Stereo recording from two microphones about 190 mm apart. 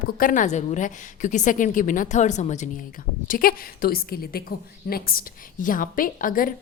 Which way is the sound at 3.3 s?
50° left (ahead or behind).